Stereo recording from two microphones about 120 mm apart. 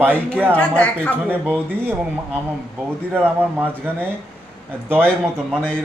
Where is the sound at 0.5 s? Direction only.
15° left (ahead or behind).